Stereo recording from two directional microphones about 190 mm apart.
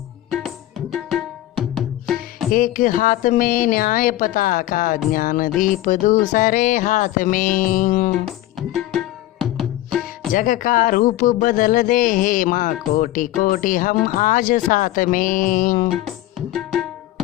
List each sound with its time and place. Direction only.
0.3 s music: centre (ahead or behind)
2.5 s speech: 45° left (ahead or behind)
8.5 s music: centre (ahead or behind)
10.3 s speech: 45° left (ahead or behind)